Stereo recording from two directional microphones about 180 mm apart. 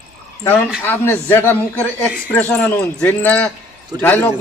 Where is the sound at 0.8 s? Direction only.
10° left (ahead or behind).